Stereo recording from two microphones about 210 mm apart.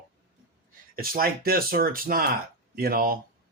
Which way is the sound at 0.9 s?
45° right (ahead or behind).